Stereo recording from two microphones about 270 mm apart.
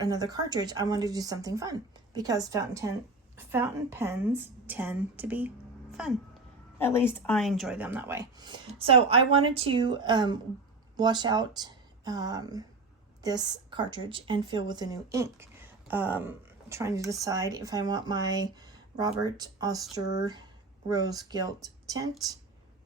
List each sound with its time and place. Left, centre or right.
0.0 s speech: centre
6.7 s speech: centre